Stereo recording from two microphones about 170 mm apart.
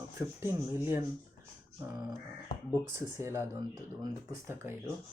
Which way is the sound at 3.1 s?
15° right (ahead or behind).